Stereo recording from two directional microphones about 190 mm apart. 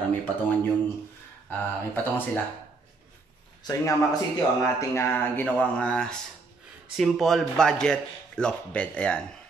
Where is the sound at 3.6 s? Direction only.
20° left (ahead or behind).